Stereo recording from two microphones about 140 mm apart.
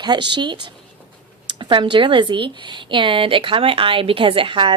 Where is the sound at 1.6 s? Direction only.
35° right (ahead or behind).